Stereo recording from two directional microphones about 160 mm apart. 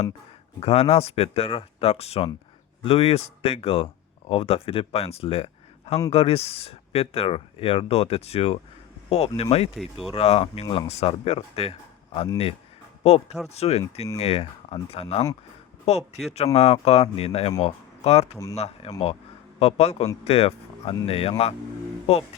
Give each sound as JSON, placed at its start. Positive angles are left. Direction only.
{"t": 0.6, "sound": "speech", "side_deg": 40}